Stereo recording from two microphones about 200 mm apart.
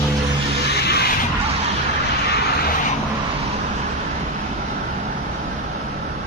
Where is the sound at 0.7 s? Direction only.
50° left (ahead or behind).